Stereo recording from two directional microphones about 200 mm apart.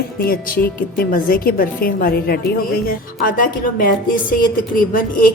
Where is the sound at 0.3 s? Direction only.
45° left (ahead or behind).